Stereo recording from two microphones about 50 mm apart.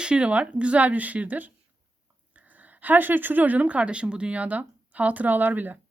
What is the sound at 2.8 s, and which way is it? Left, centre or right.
Speech, right.